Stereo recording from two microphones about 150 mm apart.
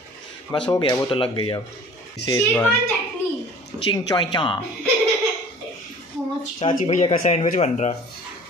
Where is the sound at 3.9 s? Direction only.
30° left (ahead or behind).